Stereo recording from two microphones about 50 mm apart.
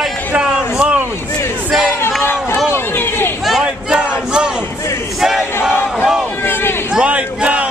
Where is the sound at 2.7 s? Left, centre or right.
Left.